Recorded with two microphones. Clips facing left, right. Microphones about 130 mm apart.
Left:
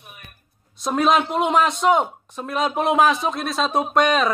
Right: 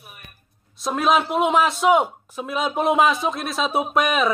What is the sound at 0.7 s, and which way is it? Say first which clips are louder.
Speech: left 1 dB; centre (ahead or behind).